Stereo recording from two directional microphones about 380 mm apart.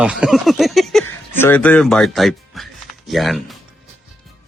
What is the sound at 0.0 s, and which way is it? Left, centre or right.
Speech, centre.